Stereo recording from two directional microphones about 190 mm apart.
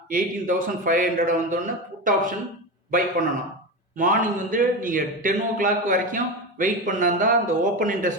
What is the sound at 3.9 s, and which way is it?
A man's voice, 45° right (ahead or behind).